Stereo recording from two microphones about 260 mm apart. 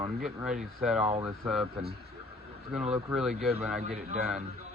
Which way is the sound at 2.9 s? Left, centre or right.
Centre.